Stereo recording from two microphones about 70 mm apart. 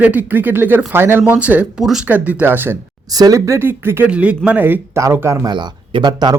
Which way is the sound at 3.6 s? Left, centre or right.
Right.